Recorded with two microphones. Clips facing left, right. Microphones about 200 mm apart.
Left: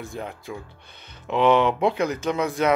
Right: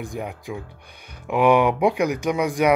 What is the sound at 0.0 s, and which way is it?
Speech, 15° right (ahead or behind).